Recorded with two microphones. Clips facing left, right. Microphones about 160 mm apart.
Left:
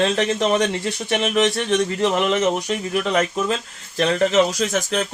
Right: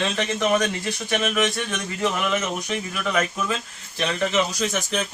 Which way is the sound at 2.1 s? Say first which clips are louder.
Left 6 dB; 30° left (ahead or behind).